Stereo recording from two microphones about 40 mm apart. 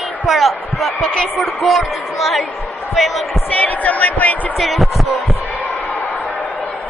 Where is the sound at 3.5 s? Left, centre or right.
Left.